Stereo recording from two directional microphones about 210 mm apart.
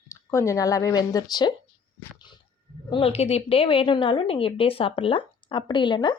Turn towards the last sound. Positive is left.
turn(degrees=20)  # may be behind; listen again after turning